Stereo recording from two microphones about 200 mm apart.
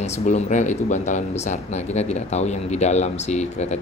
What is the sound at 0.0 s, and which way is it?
Speech, 35° left (ahead or behind).